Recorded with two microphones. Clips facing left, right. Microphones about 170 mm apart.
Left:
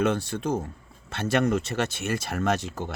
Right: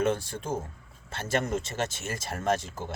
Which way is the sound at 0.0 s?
70° left (ahead or behind).